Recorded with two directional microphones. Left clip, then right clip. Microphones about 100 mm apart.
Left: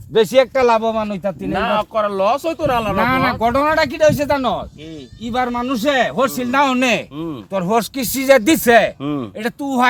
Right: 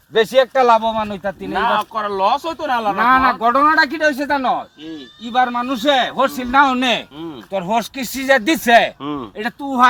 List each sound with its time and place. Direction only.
0.1 s speech: 15° left (ahead or behind)
0.5 s speech: 35° left (ahead or behind)
1.5 s speech: 60° left (ahead or behind); by 2.6 s 85° left
3.0 s a man's voice: 45° left (ahead or behind)
3.5 s a man's voice: 35° left (ahead or behind)
8.6 s speech: 30° left (ahead or behind)
9.0 s a man's voice: 50° left (ahead or behind)